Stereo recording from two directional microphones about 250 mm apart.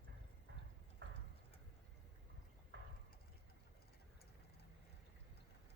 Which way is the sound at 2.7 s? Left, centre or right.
Right.